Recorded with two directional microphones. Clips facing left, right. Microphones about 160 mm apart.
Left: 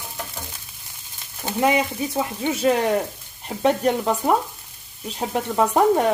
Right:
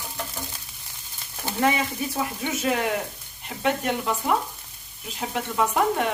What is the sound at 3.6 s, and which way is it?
Speech, 35° left (ahead or behind).